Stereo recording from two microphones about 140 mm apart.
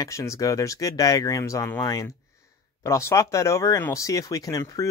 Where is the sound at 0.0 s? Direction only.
20° left (ahead or behind).